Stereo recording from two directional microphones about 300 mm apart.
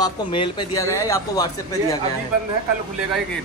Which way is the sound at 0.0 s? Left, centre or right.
Centre.